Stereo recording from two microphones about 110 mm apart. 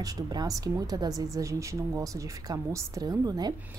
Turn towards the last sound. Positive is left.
turn(degrees=-35)  # may be behind; listen again after turning